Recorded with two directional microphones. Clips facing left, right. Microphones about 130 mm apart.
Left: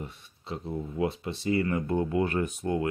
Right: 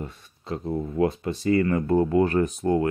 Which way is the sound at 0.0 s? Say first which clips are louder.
Right 4 dB; 45° right (ahead or behind).